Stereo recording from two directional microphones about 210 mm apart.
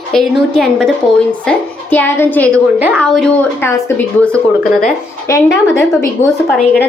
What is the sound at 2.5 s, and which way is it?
Speech, 10° right (ahead or behind).